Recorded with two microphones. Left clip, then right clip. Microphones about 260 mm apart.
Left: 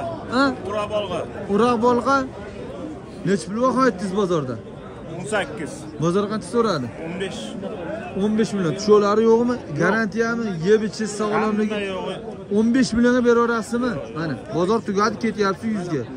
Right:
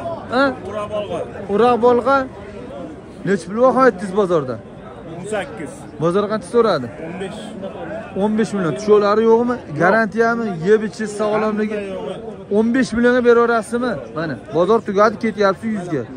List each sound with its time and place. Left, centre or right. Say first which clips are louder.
0.3 s speech: right 4 dB; centre
0.7 s speech: even; left
1.5 s a man's voice: right 5 dB; centre
3.3 s a man's voice: right 6 dB; centre
5.3 s speech: even; left
5.9 s a man's voice: right 4 dB; centre
8.2 s a man's voice: right 4 dB; centre
11.7 s speech: right 1 dB; centre
12.5 s a man's voice: right 3 dB; centre